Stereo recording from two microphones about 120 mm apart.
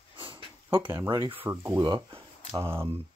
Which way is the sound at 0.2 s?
45° right (ahead or behind).